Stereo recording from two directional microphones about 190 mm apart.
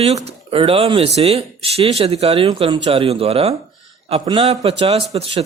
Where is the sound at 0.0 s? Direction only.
35° right (ahead or behind).